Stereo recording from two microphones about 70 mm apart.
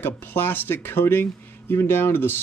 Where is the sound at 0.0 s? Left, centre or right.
Left.